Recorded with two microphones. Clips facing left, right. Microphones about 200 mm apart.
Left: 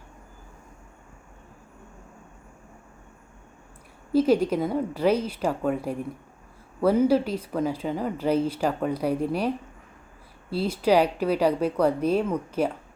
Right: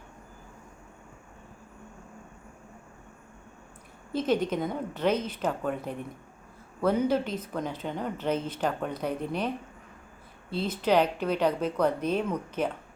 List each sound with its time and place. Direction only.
4.1 s speech: 10° left (ahead or behind)
10.5 s speech: 10° left (ahead or behind)